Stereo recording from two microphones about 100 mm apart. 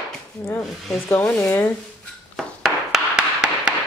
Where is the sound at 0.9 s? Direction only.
20° left (ahead or behind).